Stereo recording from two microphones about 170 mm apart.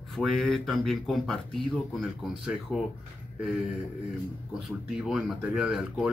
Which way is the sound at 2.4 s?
5° right (ahead or behind).